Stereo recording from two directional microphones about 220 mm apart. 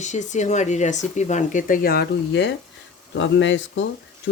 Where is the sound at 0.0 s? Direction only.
35° left (ahead or behind).